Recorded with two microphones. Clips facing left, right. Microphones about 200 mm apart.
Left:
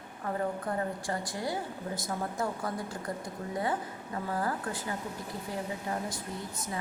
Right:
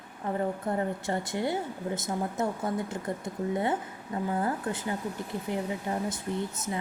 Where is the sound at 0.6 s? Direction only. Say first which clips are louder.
Right 3 dB; 25° right (ahead or behind).